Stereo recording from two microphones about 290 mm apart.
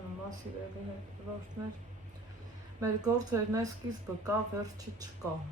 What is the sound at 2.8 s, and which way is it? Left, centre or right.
Speech, centre.